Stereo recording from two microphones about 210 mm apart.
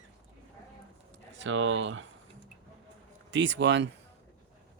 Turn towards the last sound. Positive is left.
turn(degrees=-55)  # may be behind; listen again after turning